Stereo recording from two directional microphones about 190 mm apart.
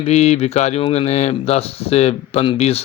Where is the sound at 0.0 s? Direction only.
35° left (ahead or behind).